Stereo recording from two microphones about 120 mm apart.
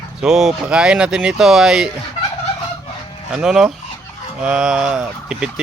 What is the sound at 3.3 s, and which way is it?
Speech, 5° right (ahead or behind).